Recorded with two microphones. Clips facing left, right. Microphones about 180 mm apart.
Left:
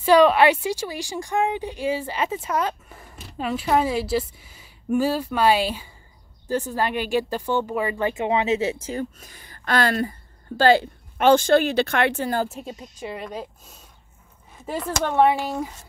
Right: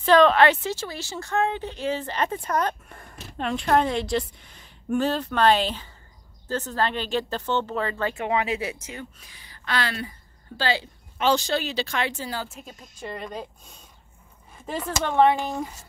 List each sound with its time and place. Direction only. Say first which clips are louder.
0.0 s speech: left 2 dB; 10° left (ahead or behind); by 9.0 s 30° left (ahead or behind)
9.2 s a woman's voice: left 5 dB; 50° left (ahead or behind)
12.4 s speech: left 8 dB; 35° left (ahead or behind)
13.0 s speech: left 2 dB; 5° left (ahead or behind)
14.9 s speech: left 1 dB; 5° left (ahead or behind)